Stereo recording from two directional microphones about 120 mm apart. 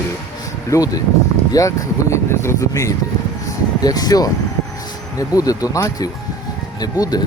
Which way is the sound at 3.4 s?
30° left (ahead or behind).